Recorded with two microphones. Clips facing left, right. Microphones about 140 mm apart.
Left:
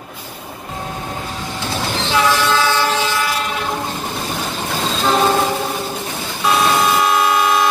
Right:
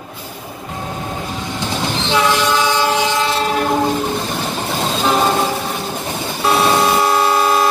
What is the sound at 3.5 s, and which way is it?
Train, 50° right (ahead or behind).